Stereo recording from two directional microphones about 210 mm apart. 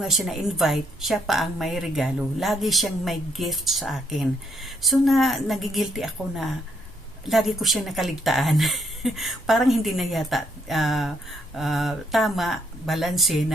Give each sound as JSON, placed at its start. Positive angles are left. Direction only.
{"t": 0.0, "sound": "a woman's voice", "side_deg": 0}